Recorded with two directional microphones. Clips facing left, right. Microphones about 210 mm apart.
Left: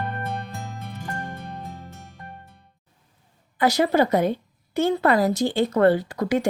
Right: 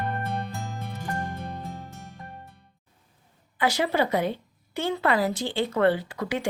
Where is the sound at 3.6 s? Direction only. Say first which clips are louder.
Left 5 dB; 40° left (ahead or behind).